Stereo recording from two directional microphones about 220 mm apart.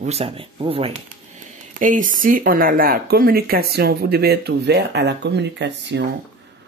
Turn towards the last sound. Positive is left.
turn(degrees=-50)  # may be behind; listen again after turning